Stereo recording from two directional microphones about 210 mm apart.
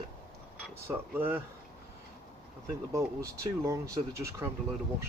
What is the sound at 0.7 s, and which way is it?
Speech, 10° right (ahead or behind).